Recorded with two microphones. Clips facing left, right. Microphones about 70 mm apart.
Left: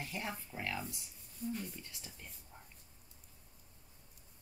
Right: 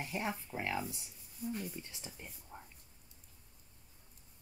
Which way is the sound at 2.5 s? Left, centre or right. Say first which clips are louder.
Right 6 dB; right.